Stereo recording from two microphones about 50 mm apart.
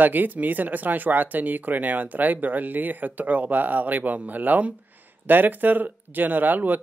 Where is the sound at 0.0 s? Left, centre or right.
Right.